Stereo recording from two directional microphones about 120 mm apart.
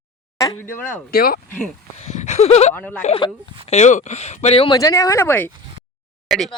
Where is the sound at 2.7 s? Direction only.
15° left (ahead or behind).